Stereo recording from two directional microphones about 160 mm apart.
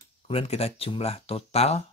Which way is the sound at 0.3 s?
40° left (ahead or behind).